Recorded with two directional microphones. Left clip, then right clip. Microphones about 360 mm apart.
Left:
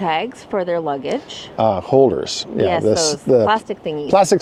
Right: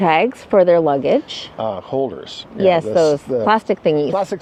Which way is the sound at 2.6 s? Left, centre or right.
Right.